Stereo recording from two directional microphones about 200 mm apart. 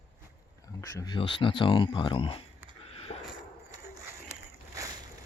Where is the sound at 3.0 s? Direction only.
30° left (ahead or behind).